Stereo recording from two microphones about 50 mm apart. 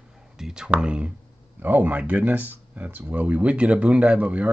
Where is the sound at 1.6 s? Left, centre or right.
Right.